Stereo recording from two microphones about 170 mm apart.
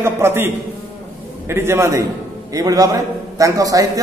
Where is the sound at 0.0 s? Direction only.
15° right (ahead or behind).